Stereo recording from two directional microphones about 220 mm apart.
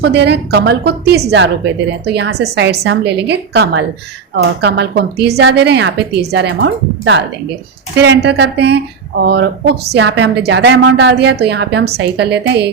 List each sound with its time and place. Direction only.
0.0 s speech: 50° right (ahead or behind)